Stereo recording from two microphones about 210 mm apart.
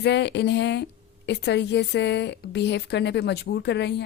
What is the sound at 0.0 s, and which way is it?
A woman's voice, 55° left (ahead or behind).